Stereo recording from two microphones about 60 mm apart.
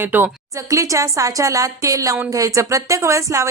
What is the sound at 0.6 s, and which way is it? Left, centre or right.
A woman's voice, right.